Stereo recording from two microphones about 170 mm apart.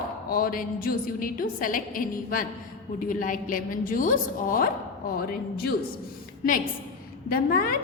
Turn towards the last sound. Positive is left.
turn(degrees=60)  # may be behind; listen again after turning